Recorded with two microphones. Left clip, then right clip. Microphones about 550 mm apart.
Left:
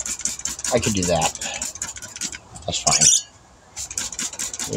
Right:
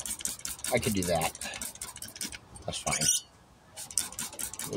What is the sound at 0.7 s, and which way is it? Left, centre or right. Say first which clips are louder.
Speech: left 8 dB; right.